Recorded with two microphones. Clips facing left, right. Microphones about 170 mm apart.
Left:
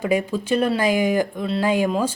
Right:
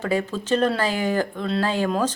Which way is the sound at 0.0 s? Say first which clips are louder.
Left 3 dB; 15° left (ahead or behind).